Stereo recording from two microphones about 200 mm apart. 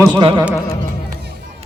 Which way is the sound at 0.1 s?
25° right (ahead or behind).